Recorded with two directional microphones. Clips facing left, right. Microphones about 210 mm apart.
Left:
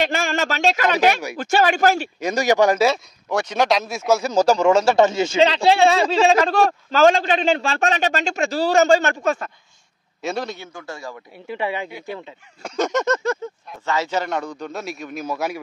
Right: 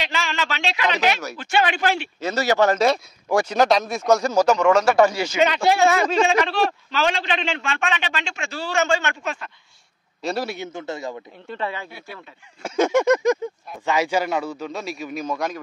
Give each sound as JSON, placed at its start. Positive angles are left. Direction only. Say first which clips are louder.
{"t": 0.0, "sound": "a man's voice", "louder": "left 5 dB", "side_deg": 50}
{"t": 2.1, "sound": "speech", "louder": "left 2 dB", "side_deg": 15}
{"t": 3.3, "sound": "speech", "louder": "right 2 dB", "side_deg": -5}
{"t": 4.4, "sound": "speech", "louder": "left 4 dB", "side_deg": 30}
{"t": 6.4, "sound": "speech", "louder": "left 4 dB", "side_deg": 45}
{"t": 10.2, "sound": "speech", "louder": "even", "side_deg": -5}
{"t": 10.6, "sound": "a man's voice", "louder": "right 4 dB", "side_deg": -20}
{"t": 11.3, "sound": "speech", "louder": "left 4 dB", "side_deg": 10}
{"t": 12.6, "sound": "speech", "louder": "right 3 dB", "side_deg": -10}